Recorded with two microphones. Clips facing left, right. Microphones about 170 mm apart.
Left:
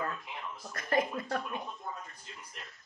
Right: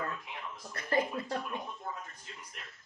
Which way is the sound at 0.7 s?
30° right (ahead or behind).